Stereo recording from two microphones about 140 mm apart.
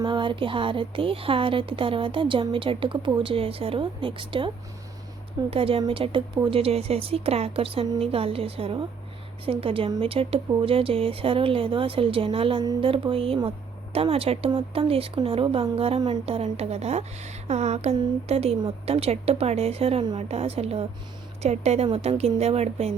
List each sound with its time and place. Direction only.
0.0 s a woman's voice: 35° right (ahead or behind); by 21.8 s 50° right (ahead or behind)
21.8 s a woman's voice: 40° right (ahead or behind)